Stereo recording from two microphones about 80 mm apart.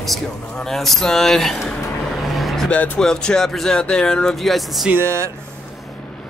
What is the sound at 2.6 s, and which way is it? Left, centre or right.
Speech, centre.